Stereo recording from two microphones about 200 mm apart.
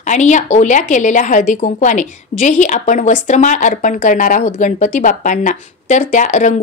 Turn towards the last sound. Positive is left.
turn(degrees=40)  # may be behind; listen again after turning